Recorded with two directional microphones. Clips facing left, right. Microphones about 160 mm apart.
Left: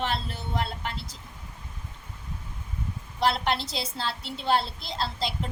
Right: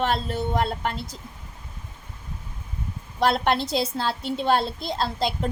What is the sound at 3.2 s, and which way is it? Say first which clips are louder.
A woman's voice: right 4 dB; 50° right (ahead or behind).